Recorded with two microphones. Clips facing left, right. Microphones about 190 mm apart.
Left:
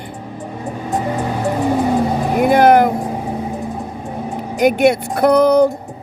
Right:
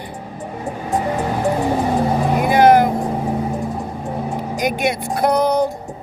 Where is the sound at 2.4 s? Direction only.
55° left (ahead or behind).